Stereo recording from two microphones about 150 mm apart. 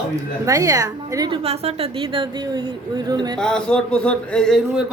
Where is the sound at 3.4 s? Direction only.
5° left (ahead or behind).